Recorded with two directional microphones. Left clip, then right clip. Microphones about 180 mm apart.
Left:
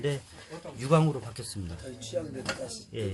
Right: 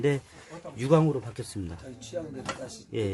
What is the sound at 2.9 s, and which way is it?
Speech, 50° right (ahead or behind).